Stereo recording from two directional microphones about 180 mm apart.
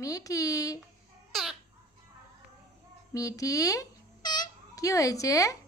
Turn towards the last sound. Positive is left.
turn(degrees=20)  # may be behind; listen again after turning